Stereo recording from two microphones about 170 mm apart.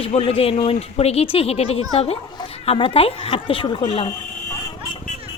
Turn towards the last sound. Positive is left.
turn(degrees=35)  # may be behind; listen again after turning